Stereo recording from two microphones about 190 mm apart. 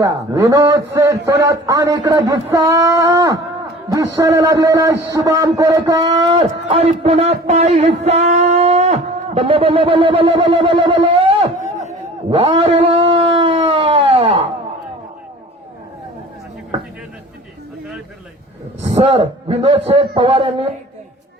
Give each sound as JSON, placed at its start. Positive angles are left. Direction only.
{"t": 0.0, "sound": "a man's voice", "side_deg": -15}
{"t": 12.3, "sound": "a sound", "side_deg": -25}
{"t": 18.9, "sound": "a man's voice", "side_deg": -30}